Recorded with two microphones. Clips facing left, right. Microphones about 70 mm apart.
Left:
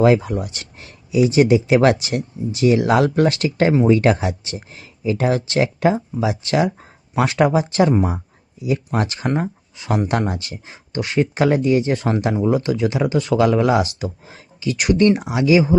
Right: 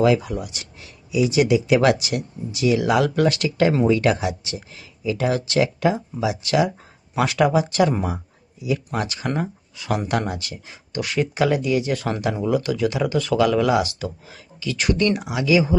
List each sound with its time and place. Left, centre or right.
0.0 s speech: left